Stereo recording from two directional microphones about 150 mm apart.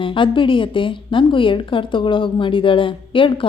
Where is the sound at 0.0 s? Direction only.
35° left (ahead or behind).